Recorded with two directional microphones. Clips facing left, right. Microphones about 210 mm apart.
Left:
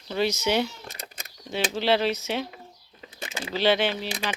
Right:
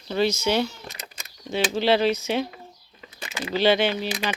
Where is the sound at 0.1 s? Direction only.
15° left (ahead or behind).